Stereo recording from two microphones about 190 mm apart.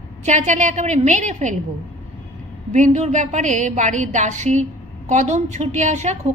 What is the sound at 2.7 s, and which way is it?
A woman's voice, 40° right (ahead or behind).